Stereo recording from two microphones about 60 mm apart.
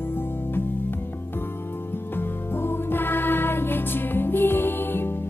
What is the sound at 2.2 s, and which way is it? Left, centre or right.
Music, left.